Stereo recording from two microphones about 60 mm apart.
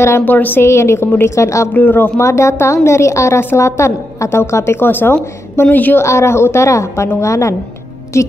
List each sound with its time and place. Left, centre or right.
0.2 s speech: left
0.7 s a woman's voice: left
1.7 s speech: left
2.1 s a woman's voice: left
5.9 s a woman's voice: left